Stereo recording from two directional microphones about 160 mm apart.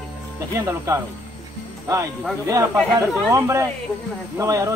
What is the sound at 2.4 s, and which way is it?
Speech, 20° right (ahead or behind).